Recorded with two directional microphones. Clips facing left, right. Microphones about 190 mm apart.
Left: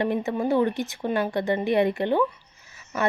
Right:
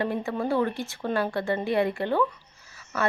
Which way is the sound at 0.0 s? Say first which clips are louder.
Left 3 dB; 20° left (ahead or behind).